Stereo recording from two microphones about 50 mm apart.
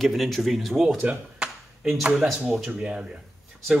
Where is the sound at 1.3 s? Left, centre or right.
Centre.